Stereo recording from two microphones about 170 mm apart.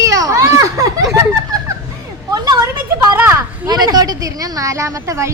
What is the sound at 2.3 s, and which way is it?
Speech, 25° right (ahead or behind).